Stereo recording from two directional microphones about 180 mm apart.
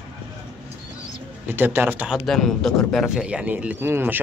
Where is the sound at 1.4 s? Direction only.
10° right (ahead or behind).